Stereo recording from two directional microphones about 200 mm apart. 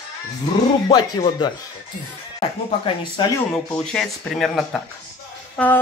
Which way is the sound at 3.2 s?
25° left (ahead or behind).